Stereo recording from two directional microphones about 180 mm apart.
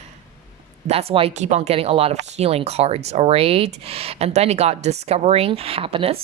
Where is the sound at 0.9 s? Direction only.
35° right (ahead or behind).